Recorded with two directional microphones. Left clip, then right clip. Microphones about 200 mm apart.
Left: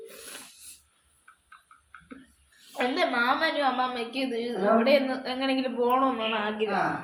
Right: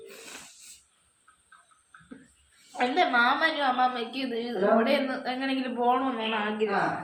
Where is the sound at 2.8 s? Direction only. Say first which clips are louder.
Right 3 dB; 15° right (ahead or behind).